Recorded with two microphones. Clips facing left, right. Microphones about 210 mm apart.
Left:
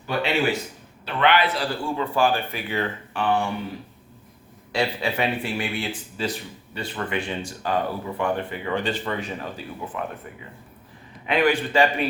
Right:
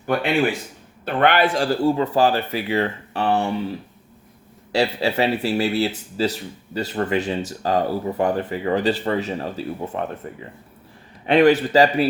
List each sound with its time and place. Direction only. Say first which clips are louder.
1.0 s a man's voice: right 3 dB; 50° right (ahead or behind)
4.7 s speech: right 4 dB; 40° right (ahead or behind)